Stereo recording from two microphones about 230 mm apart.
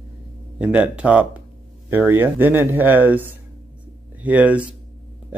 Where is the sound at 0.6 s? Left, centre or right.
Centre.